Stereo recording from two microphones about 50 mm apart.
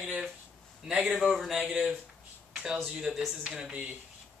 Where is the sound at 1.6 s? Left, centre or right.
Centre.